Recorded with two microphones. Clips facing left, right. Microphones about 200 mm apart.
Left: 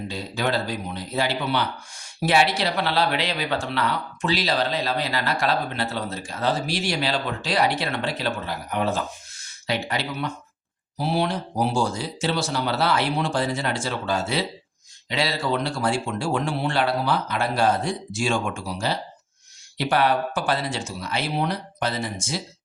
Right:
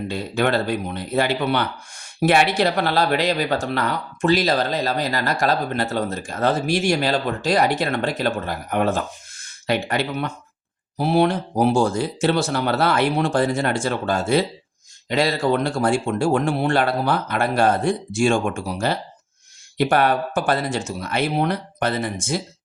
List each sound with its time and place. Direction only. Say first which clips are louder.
0.1 s speech: right 5 dB; 55° right (ahead or behind)